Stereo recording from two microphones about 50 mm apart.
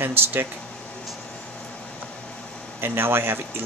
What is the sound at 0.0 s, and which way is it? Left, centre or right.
Speech, right.